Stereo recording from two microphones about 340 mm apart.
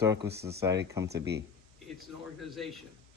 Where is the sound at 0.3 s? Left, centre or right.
Right.